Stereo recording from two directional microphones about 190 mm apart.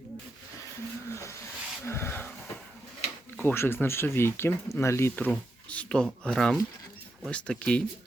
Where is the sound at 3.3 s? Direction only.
10° left (ahead or behind).